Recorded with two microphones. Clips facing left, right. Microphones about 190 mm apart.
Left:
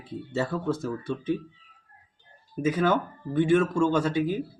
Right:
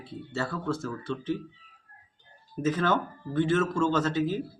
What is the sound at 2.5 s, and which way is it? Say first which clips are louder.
Speech: left 2 dB; 10° left (ahead or behind).